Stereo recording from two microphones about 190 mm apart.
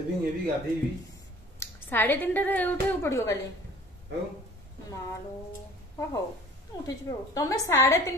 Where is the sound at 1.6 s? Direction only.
10° left (ahead or behind).